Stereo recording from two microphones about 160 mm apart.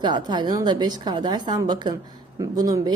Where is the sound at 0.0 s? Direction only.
30° right (ahead or behind).